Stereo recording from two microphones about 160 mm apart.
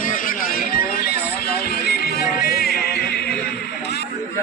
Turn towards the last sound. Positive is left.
turn(degrees=75)  # may be behind; listen again after turning